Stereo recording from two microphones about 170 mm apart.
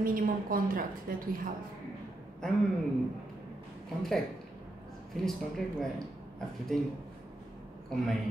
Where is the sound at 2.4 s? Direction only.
5° left (ahead or behind).